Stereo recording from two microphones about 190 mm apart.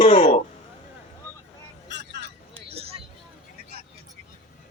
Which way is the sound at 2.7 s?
30° right (ahead or behind).